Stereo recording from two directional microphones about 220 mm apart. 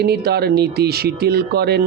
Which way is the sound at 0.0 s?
45° right (ahead or behind).